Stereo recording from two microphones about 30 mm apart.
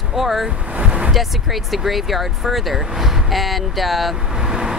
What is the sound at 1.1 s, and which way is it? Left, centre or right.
Speech, centre.